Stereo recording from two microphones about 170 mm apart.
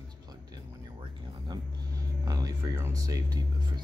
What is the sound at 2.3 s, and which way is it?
Speech, 20° right (ahead or behind).